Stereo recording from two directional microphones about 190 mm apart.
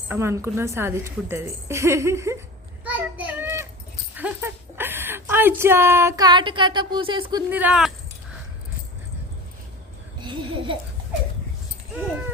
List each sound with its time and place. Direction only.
0.1 s a woman's voice: 15° right (ahead or behind)
2.8 s child singing: 10° right (ahead or behind)
4.2 s speech: 10° right (ahead or behind)
7.5 s speech: 5° right (ahead or behind)
10.2 s a sound: 25° right (ahead or behind)
11.9 s speech: 10° right (ahead or behind)